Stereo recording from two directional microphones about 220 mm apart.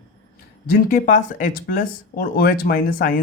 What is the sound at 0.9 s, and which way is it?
Speech, 35° left (ahead or behind).